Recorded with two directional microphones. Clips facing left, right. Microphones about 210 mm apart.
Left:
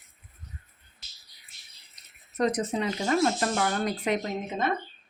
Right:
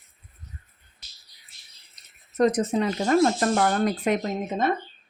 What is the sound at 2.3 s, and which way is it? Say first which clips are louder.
Speech: right 5 dB; 45° right (ahead or behind).